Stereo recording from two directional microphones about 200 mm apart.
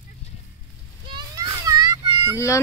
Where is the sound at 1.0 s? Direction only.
20° right (ahead or behind).